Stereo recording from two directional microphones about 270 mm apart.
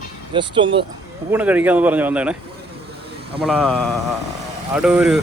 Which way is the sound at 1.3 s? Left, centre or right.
Centre.